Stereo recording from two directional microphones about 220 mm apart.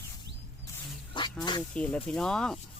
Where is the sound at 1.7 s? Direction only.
5° left (ahead or behind).